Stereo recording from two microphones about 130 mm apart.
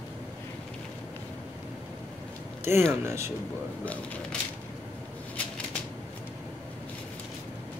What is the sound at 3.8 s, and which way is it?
Speech, 10° left (ahead or behind).